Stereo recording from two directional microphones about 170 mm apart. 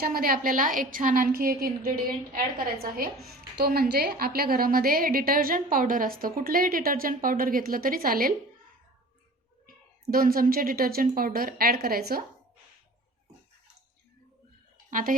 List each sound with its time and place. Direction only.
0.0 s a woman's voice: 60° right (ahead or behind)
9.6 s a woman's voice: 60° right (ahead or behind)
14.8 s a sound: 50° right (ahead or behind)